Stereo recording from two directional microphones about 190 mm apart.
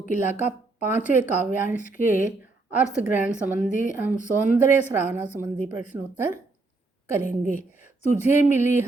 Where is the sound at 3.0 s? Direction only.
40° left (ahead or behind).